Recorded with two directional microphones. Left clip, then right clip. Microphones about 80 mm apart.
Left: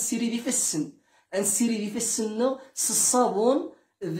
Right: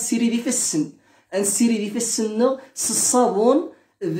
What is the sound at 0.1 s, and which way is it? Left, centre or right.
A woman's voice, left.